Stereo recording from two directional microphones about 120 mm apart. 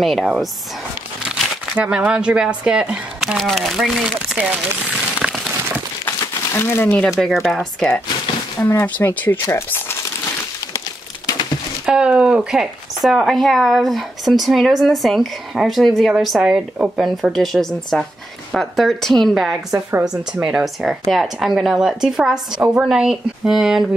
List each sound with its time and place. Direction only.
0.0 s speech: centre (ahead or behind)
1.3 s crumpling: centre (ahead or behind)
1.8 s speech: 10° right (ahead or behind)
5.2 s a sound: centre (ahead or behind)
6.0 s crumpling: 20° left (ahead or behind)
7.1 s speech: centre (ahead or behind)
8.5 s speech: 15° left (ahead or behind)
11.8 s speech: 5° right (ahead or behind)
19.9 s speech: 20° right (ahead or behind)
20.4 s speech: 5° right (ahead or behind)